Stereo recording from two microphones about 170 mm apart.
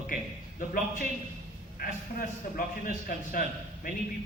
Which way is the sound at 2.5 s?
55° left (ahead or behind).